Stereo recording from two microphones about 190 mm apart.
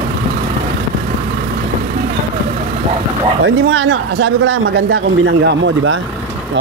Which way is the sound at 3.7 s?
75° right (ahead or behind).